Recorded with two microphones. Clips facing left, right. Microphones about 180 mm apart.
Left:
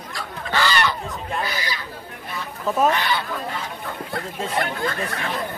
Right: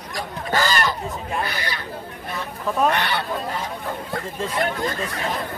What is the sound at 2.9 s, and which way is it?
Speech, 65° right (ahead or behind).